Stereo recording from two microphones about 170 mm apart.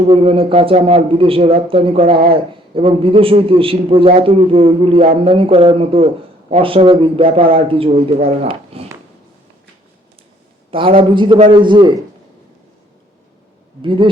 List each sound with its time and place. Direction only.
0.1 s a man's voice: 30° right (ahead or behind)
10.7 s a man's voice: 30° right (ahead or behind)
13.8 s a man's voice: 30° right (ahead or behind)